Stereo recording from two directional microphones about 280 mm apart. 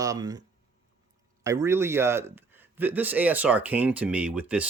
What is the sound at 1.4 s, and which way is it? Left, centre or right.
Speech, centre.